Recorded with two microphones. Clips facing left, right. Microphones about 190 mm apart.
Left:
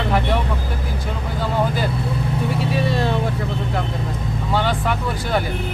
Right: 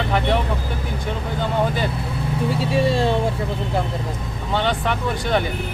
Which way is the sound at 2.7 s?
30° right (ahead or behind).